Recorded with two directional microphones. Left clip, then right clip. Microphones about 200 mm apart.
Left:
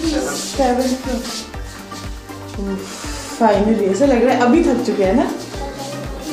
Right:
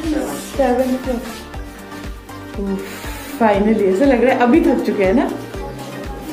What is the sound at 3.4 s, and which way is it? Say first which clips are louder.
Speech: left 1 dB; 10° right (ahead or behind).